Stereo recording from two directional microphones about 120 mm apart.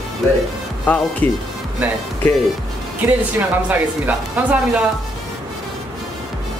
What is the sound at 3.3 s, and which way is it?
A woman's voice, 15° right (ahead or behind).